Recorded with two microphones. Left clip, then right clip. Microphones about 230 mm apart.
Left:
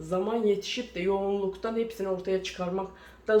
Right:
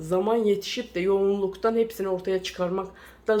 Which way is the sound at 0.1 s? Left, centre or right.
Right.